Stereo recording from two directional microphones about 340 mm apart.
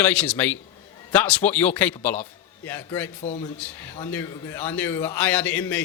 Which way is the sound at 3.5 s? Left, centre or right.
Centre.